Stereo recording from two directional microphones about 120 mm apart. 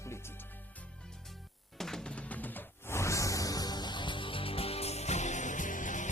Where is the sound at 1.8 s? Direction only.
5° left (ahead or behind).